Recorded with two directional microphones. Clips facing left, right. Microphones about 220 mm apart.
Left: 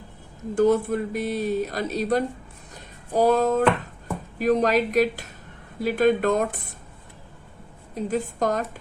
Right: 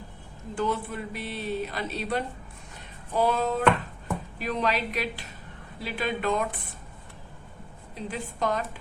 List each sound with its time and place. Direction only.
0.5 s a woman's voice: 45° left (ahead or behind)
7.9 s a woman's voice: 45° left (ahead or behind)